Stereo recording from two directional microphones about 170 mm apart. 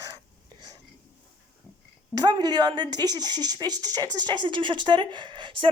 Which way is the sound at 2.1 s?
25° right (ahead or behind).